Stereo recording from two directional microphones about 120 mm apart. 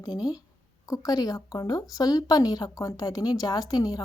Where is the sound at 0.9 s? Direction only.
30° left (ahead or behind).